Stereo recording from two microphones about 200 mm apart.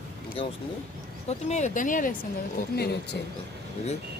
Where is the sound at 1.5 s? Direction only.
35° left (ahead or behind).